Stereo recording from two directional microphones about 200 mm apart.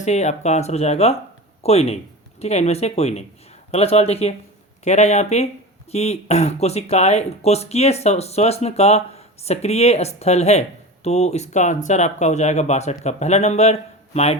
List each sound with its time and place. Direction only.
0.0 s speech: 35° left (ahead or behind)